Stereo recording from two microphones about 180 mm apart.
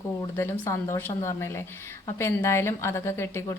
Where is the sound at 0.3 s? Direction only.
15° left (ahead or behind).